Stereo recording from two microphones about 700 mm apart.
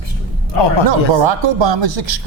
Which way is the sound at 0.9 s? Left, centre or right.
Right.